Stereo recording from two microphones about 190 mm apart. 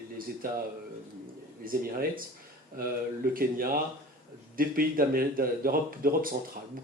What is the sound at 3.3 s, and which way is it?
Speech, 50° right (ahead or behind).